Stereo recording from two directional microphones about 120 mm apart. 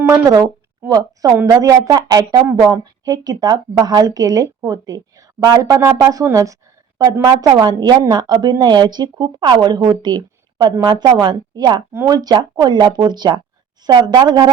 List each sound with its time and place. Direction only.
0.0 s a woman's voice: 25° right (ahead or behind)
11.9 s a woman's voice: 20° right (ahead or behind)
12.1 s a woman's voice: 35° right (ahead or behind)